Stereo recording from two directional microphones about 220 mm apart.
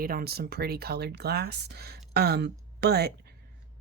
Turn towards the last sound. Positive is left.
turn(degrees=-45)  # may be behind; listen again after turning